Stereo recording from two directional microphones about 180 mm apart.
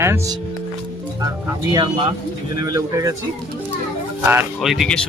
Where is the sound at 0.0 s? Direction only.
15° right (ahead or behind).